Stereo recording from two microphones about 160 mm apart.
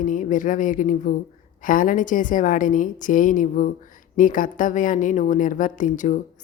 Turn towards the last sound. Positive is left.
turn(degrees=50)  # may be behind; listen again after turning